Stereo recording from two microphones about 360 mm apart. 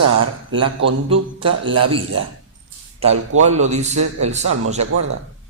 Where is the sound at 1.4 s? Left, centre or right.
Centre.